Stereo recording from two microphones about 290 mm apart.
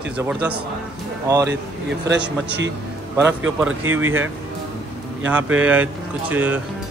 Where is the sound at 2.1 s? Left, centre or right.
Right.